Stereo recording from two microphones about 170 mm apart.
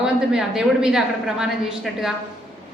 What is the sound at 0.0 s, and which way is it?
A woman's voice, 5° right (ahead or behind).